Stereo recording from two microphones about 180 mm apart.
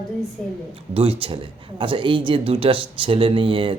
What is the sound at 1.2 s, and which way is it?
A man's voice, 30° right (ahead or behind).